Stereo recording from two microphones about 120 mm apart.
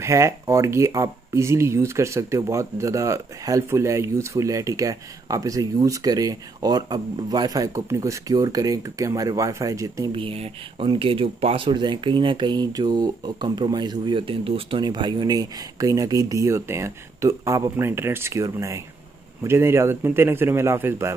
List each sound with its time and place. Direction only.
0.0 s speech: 25° right (ahead or behind)
10.1 s speech: 50° right (ahead or behind); by 21.1 s 20° right (ahead or behind)